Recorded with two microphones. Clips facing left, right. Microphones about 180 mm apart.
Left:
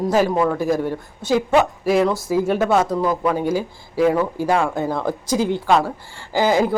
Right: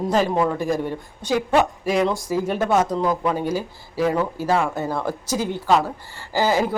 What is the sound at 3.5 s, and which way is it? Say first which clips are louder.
Speech: left 3 dB; 10° left (ahead or behind).